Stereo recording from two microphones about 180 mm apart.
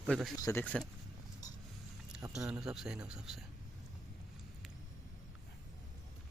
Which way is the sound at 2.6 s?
5° right (ahead or behind).